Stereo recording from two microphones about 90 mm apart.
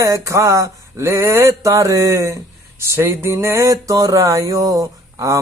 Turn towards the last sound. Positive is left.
turn(degrees=-40)  # may be behind; listen again after turning